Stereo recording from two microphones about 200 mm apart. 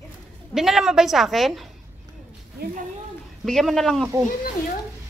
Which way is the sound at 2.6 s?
50° right (ahead or behind).